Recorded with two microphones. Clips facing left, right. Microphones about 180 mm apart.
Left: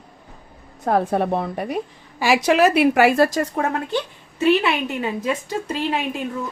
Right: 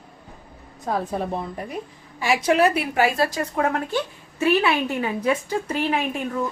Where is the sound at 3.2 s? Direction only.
40° left (ahead or behind).